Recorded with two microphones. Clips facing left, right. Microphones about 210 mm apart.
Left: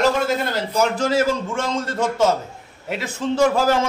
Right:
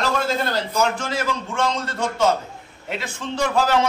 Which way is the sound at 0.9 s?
40° left (ahead or behind).